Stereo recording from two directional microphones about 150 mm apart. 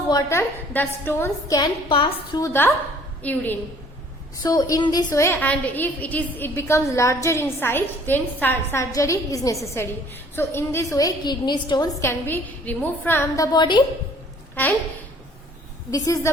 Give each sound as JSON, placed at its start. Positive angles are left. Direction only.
{"t": 0.1, "sound": "a woman's voice", "side_deg": 20}
{"t": 2.4, "sound": "a woman's voice", "side_deg": 15}
{"t": 4.4, "sound": "a woman's voice", "side_deg": 25}
{"t": 12.0, "sound": "a woman's voice", "side_deg": 15}
{"t": 14.6, "sound": "a woman's voice", "side_deg": 10}
{"t": 15.9, "sound": "a woman's voice", "side_deg": 20}